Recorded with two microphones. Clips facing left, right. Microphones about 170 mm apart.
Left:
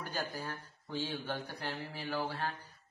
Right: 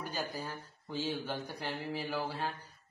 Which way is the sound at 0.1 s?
10° right (ahead or behind).